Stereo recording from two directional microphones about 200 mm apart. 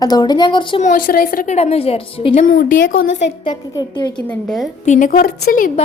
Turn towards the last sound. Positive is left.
turn(degrees=45)  # may be behind; listen again after turning